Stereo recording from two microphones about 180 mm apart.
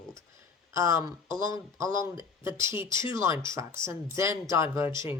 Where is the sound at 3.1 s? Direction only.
15° right (ahead or behind).